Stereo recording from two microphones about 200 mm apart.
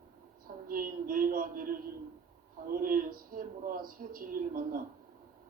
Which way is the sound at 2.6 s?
45° right (ahead or behind).